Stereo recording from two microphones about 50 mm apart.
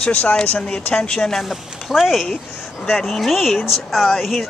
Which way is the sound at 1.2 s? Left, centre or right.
Centre.